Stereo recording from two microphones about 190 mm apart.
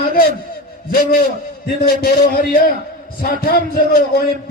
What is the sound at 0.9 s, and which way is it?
A man's voice, 55° left (ahead or behind).